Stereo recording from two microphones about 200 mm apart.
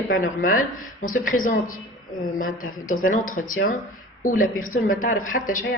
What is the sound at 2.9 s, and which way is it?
A woman's voice, 40° left (ahead or behind).